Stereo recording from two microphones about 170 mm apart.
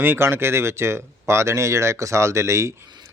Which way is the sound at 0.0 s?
10° right (ahead or behind).